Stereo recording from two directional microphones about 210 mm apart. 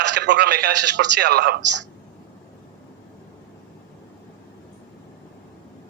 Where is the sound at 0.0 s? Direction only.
55° right (ahead or behind).